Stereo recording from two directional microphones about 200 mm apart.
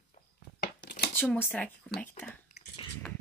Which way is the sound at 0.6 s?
55° left (ahead or behind).